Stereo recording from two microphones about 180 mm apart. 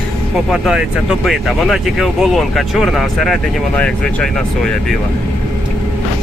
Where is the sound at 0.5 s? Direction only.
Centre (ahead or behind).